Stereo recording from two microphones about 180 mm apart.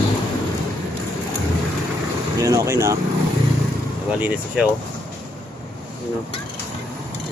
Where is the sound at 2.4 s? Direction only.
20° right (ahead or behind).